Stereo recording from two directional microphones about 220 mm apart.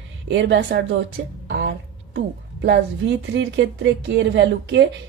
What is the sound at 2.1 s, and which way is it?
Speech, 55° right (ahead or behind).